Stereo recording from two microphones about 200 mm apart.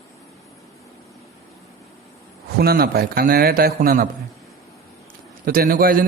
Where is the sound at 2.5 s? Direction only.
50° right (ahead or behind).